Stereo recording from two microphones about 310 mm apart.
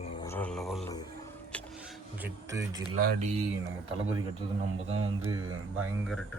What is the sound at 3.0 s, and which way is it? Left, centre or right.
Speech, right.